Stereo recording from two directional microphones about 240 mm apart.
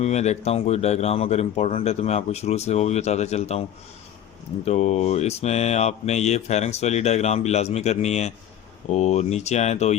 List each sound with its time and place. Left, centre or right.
0.0 s mantra: left
4.6 s mantra: left